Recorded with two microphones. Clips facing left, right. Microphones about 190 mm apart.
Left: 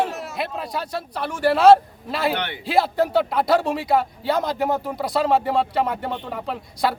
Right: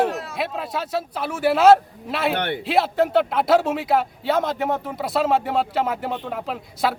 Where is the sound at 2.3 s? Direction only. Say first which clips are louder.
Right 4 dB; 50° right (ahead or behind).